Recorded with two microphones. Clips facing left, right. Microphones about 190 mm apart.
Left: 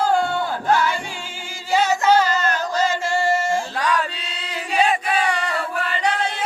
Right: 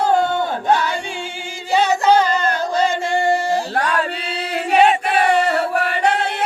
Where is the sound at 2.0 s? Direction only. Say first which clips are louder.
Right 2 dB; 30° right (ahead or behind).